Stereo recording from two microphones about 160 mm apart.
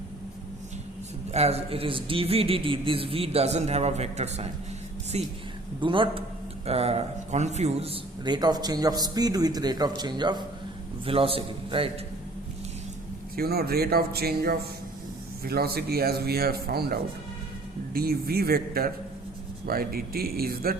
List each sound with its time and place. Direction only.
1.3 s a man's voice: 40° right (ahead or behind)
5.8 s a man's voice: 30° right (ahead or behind)
8.2 s a man's voice: 25° right (ahead or behind)
13.3 s speech: 75° right (ahead or behind)